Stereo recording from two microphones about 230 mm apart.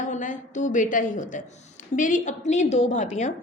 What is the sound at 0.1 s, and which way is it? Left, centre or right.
A woman's voice, left.